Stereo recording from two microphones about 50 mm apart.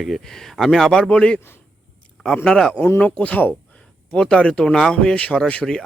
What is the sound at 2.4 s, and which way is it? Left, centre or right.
Speech, centre.